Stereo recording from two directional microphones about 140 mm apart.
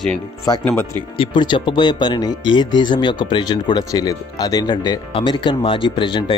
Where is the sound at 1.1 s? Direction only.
35° left (ahead or behind).